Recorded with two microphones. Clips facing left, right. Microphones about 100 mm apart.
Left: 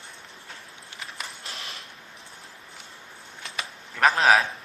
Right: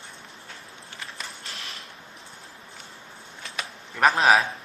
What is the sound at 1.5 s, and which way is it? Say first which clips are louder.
Creak: even; 30° left (ahead or behind).